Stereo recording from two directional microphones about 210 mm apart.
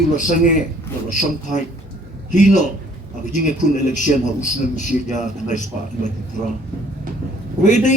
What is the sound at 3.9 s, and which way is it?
A man's voice, 35° left (ahead or behind).